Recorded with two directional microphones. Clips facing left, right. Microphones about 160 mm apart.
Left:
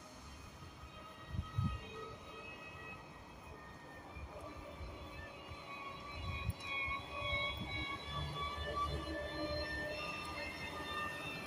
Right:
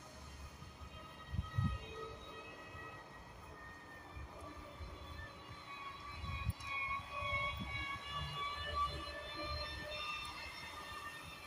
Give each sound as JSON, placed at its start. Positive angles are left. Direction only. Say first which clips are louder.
{"t": 7.2, "sound": "vehicle", "louder": "left 1 dB", "side_deg": 25}